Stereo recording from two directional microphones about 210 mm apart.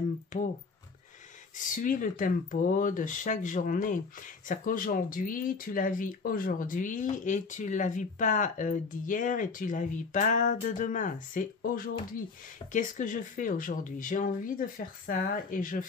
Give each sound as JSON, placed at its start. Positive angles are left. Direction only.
{"t": 1.8, "sound": "speech", "side_deg": 40}